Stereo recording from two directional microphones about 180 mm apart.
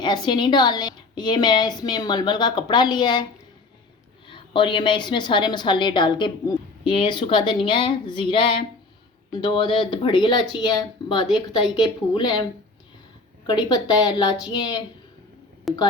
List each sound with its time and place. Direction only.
0.0 s a woman's voice: 25° left (ahead or behind)
4.3 s a woman's voice: 30° left (ahead or behind)
13.5 s a woman's voice: 20° left (ahead or behind)
15.7 s speech: centre (ahead or behind)